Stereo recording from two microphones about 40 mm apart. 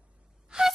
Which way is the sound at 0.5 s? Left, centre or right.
Centre.